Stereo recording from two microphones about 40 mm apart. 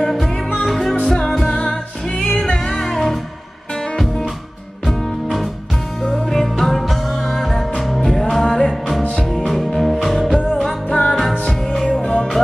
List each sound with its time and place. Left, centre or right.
0.0 s music: centre
1.5 s music: centre
4.8 s music: centre
10.9 s music: left
11.7 s music: centre